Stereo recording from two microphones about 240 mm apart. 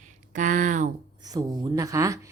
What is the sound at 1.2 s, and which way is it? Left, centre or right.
Speech, centre.